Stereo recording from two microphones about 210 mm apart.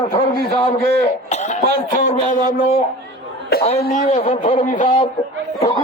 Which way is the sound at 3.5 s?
50° left (ahead or behind).